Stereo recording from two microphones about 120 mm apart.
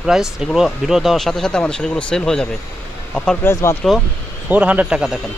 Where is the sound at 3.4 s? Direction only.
20° left (ahead or behind).